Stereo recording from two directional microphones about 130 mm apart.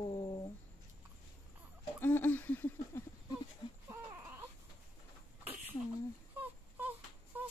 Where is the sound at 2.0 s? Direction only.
15° left (ahead or behind).